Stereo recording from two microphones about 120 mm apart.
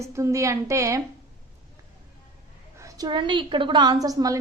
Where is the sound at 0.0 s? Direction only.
25° right (ahead or behind).